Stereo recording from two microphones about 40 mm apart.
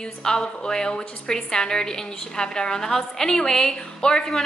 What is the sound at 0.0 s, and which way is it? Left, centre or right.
A woman's voice, centre.